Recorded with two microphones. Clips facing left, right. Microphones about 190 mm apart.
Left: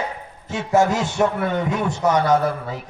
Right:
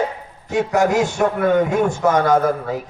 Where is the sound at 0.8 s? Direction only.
45° right (ahead or behind).